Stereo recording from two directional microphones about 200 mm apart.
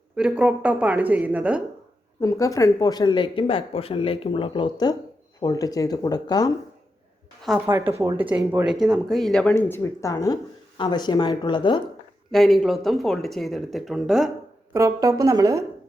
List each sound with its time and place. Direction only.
0.2 s a woman's voice: 5° right (ahead or behind)
2.2 s speech: 15° left (ahead or behind)
7.4 s a woman's voice: 5° right (ahead or behind); by 11.8 s 25° left (ahead or behind)
12.3 s speech: centre (ahead or behind)
14.7 s a woman's voice: 15° right (ahead or behind)